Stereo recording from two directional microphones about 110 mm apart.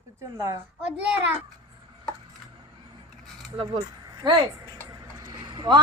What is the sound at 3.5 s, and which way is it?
Speech, 55° right (ahead or behind).